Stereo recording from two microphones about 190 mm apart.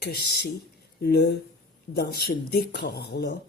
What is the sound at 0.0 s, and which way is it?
Speech, 55° left (ahead or behind).